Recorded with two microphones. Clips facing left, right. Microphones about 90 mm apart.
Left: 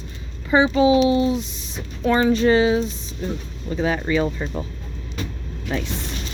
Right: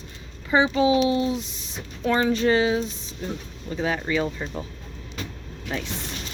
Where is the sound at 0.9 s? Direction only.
90° left.